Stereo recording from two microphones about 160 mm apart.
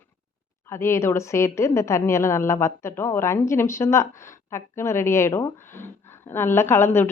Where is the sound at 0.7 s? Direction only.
15° left (ahead or behind).